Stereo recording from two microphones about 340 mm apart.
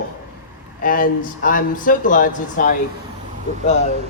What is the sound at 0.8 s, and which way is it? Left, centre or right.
Speech, left.